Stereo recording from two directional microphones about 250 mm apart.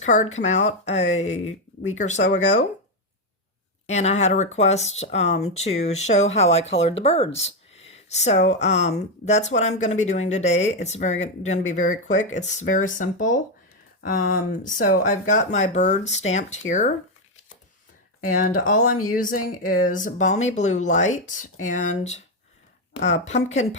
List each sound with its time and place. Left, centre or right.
0.0 s speech: left
3.8 s speech: left
18.3 s speech: left